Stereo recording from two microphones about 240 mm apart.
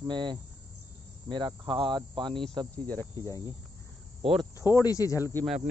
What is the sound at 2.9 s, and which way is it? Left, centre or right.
Speech, centre.